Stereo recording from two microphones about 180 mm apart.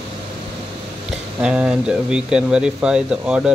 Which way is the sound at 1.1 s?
5° right (ahead or behind).